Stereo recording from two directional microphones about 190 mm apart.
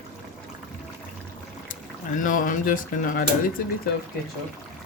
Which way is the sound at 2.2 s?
45° left (ahead or behind).